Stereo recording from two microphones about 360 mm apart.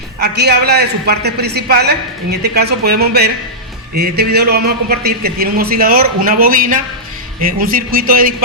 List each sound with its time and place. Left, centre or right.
0.2 s a man's voice: right